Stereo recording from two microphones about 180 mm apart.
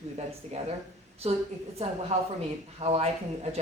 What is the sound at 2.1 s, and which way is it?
A woman's voice, 40° right (ahead or behind).